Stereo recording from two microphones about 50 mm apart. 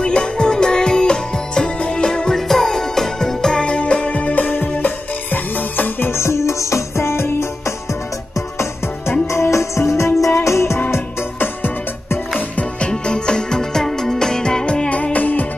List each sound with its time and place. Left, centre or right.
0.0 s music: centre
2.0 s music: centre
3.6 s music: centre
4.2 s music: left
6.2 s music: left
9.3 s music: left
10.9 s music: left
12.5 s music: centre
14.9 s music: left